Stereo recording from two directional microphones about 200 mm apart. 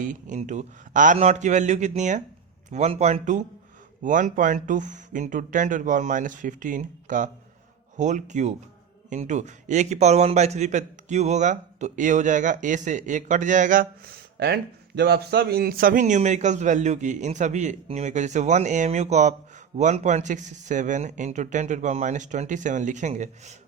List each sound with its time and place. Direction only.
0.0 s speech: 40° right (ahead or behind)